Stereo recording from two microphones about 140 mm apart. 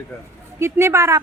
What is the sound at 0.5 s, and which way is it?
Speech, 20° right (ahead or behind).